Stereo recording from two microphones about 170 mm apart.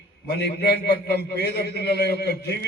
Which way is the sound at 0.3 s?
70° left (ahead or behind).